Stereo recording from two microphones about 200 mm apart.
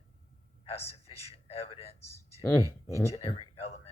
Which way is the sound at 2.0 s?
15° left (ahead or behind).